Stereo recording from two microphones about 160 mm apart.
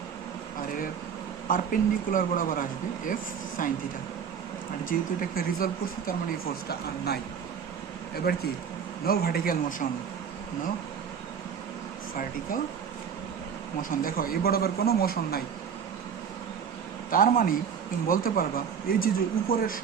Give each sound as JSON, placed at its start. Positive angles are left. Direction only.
{"t": 1.5, "sound": "speech", "side_deg": 60}
{"t": 4.9, "sound": "speech", "side_deg": 65}
{"t": 6.7, "sound": "speech", "side_deg": 80}
{"t": 8.3, "sound": "speech", "side_deg": 75}
{"t": 14.0, "sound": "speech", "side_deg": 65}
{"t": 17.1, "sound": "speech", "side_deg": 60}